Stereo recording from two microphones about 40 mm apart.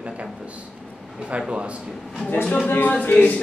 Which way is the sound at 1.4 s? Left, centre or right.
Right.